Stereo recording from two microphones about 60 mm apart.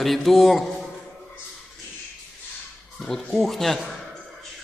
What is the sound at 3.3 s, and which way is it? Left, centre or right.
Speech, centre.